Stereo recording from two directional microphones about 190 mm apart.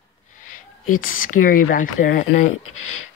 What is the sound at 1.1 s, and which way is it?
Speech, 45° left (ahead or behind).